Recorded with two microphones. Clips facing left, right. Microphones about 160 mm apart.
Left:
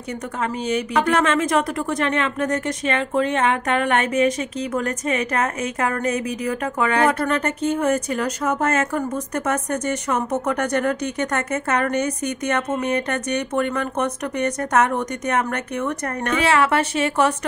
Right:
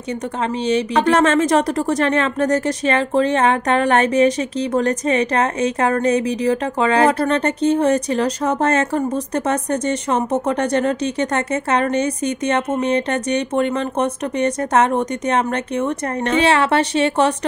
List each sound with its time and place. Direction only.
0.7 s speech: 30° right (ahead or behind)